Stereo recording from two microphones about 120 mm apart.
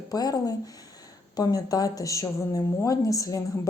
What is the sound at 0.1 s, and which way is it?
A woman's voice, 30° left (ahead or behind).